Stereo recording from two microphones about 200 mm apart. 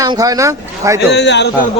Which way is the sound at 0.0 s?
15° right (ahead or behind).